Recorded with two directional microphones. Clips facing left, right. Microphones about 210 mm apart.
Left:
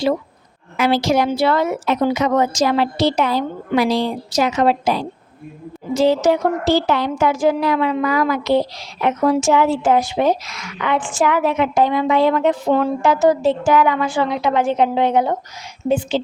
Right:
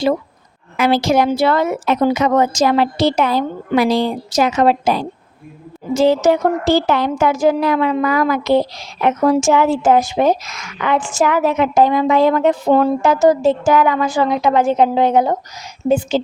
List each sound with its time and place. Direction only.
0.8 s a woman's voice: 50° right (ahead or behind)